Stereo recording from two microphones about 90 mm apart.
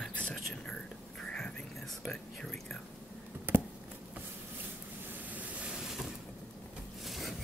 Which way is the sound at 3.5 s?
25° right (ahead or behind).